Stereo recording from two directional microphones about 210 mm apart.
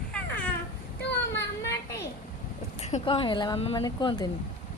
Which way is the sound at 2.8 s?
30° left (ahead or behind).